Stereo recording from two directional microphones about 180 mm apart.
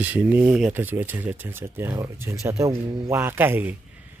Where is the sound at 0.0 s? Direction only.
10° right (ahead or behind).